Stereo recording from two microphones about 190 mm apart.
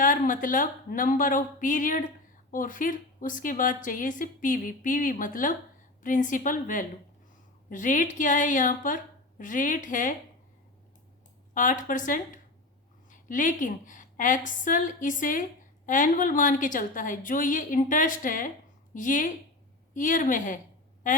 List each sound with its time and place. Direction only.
0.0 s a woman's voice: 45° left (ahead or behind)
11.5 s a woman's voice: 45° left (ahead or behind)